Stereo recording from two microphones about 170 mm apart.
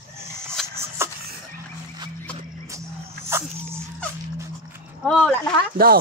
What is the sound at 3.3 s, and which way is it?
Speech, 15° right (ahead or behind).